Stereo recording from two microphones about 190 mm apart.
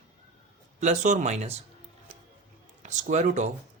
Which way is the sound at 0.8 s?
40° right (ahead or behind).